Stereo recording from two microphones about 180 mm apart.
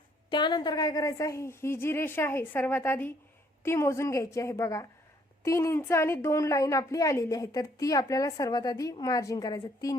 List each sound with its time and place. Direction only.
0.3 s a woman's voice: 25° left (ahead or behind)